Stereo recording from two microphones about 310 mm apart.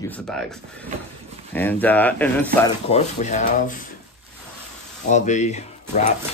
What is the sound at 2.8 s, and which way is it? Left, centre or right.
Speech, left.